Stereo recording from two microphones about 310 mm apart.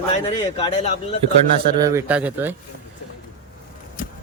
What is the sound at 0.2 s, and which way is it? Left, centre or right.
Speech, centre.